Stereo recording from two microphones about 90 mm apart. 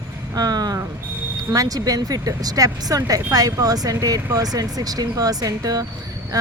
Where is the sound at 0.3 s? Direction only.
45° right (ahead or behind).